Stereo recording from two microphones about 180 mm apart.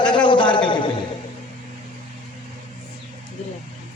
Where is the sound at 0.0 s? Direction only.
25° left (ahead or behind).